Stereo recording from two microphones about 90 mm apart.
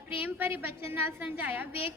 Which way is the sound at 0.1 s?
20° right (ahead or behind).